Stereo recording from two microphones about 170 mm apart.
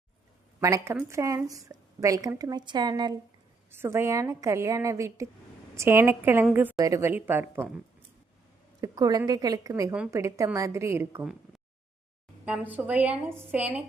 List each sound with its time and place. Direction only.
0.6 s a woman's voice: 20° right (ahead or behind)
3.7 s a woman's voice: 15° right (ahead or behind)
8.8 s a woman's voice: 20° right (ahead or behind)
12.5 s a woman's voice: 10° right (ahead or behind)